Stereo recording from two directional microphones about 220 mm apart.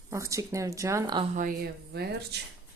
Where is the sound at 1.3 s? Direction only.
40° right (ahead or behind).